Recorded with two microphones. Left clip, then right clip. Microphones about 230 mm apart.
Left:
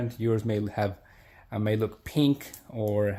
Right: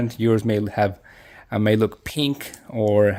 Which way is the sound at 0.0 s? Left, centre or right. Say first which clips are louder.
Right 8 dB; right.